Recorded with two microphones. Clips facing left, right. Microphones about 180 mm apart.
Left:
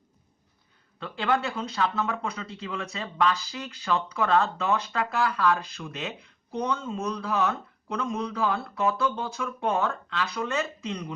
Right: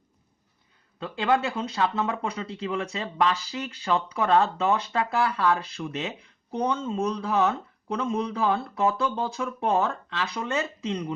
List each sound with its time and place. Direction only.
1.3 s speech: 25° right (ahead or behind)